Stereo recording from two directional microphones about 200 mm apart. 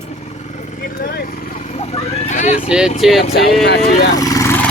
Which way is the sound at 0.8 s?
50° left (ahead or behind).